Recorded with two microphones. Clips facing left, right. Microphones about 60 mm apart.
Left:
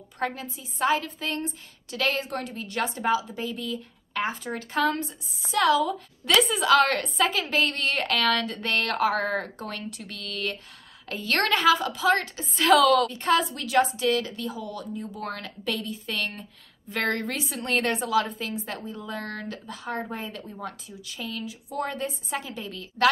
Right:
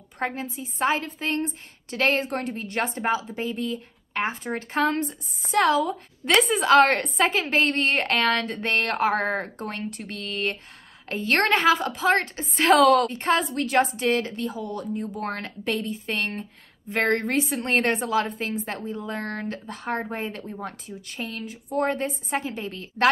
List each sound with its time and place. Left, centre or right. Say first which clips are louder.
0.2 s a woman's voice: right 1 dB; right